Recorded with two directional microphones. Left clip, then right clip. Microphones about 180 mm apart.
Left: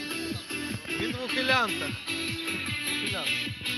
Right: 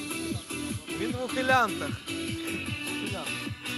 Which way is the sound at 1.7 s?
90° right.